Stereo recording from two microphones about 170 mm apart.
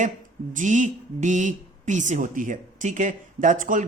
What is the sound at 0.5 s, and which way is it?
Speech, 50° right (ahead or behind).